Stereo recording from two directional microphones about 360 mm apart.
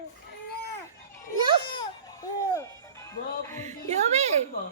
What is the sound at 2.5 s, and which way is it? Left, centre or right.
Music, centre.